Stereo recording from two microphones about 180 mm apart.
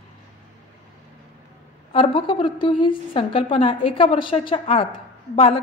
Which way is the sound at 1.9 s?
30° left (ahead or behind).